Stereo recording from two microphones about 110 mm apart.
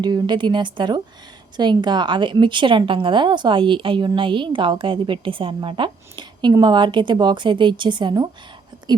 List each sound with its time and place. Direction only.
0.0 s a woman's voice: 40° right (ahead or behind)